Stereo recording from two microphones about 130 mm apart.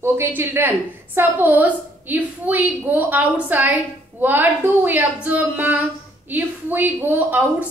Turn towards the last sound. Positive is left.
turn(degrees=-15)  # may be behind; listen again after turning